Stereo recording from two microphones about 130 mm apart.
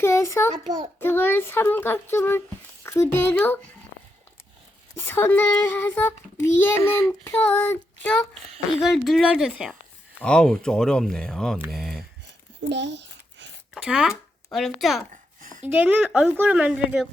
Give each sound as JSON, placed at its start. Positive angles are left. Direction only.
{"t": 0.0, "sound": "a child's voice", "side_deg": 20}
{"t": 4.9, "sound": "a child's voice", "side_deg": 20}
{"t": 8.8, "sound": "speech", "side_deg": 0}
{"t": 10.2, "sound": "speech", "side_deg": 5}
{"t": 11.7, "sound": "a sound", "side_deg": 0}
{"t": 13.7, "sound": "speech", "side_deg": -5}
{"t": 15.1, "sound": "a sound", "side_deg": -85}
{"t": 15.6, "sound": "a woman's voice", "side_deg": -15}